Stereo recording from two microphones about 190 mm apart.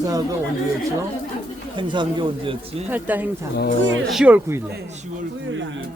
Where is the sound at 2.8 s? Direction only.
10° right (ahead or behind).